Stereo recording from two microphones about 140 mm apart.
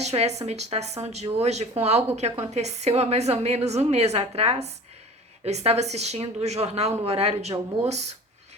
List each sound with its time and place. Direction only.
0.0 s a woman's voice: 50° right (ahead or behind)